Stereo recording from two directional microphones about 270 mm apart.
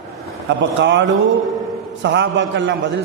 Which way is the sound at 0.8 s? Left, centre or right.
Right.